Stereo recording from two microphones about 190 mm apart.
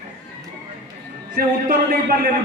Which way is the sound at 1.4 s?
50° right (ahead or behind).